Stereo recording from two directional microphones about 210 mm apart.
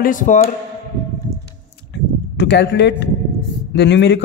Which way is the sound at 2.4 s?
55° left (ahead or behind).